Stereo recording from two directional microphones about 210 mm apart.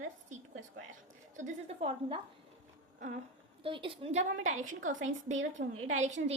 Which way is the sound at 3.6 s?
25° right (ahead or behind).